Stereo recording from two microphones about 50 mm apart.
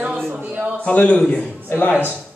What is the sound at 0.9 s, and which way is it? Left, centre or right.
Speech, left.